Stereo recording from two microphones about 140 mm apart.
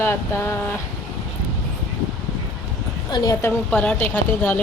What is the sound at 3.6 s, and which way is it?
Speech, 10° left (ahead or behind).